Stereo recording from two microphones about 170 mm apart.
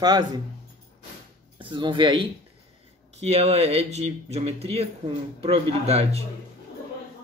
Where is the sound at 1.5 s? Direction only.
30° right (ahead or behind).